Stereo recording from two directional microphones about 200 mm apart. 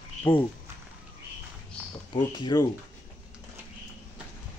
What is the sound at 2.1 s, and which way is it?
Speech, 20° left (ahead or behind).